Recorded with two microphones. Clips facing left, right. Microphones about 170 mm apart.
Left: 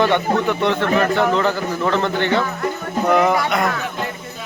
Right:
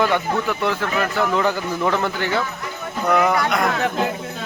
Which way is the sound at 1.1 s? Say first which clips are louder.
Left 4 dB; 30° left (ahead or behind).